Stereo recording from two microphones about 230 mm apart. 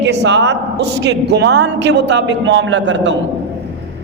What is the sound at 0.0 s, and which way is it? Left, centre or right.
A man's voice, right.